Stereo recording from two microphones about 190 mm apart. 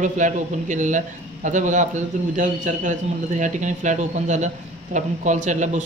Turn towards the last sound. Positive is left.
turn(degrees=-40)  # may be behind; listen again after turning